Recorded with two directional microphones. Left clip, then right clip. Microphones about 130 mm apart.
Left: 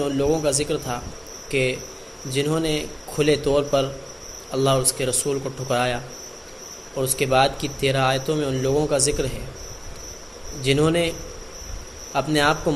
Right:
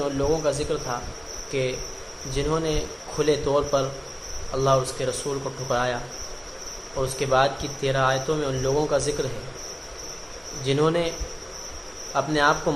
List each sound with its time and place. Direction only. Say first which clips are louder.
0.0 s speech: left 2 dB; 45° left (ahead or behind)
7.0 s speech: left 2 dB; 40° left (ahead or behind)
10.6 s speech: left 2 dB; 35° left (ahead or behind)
12.1 s speech: left 1 dB; 45° left (ahead or behind)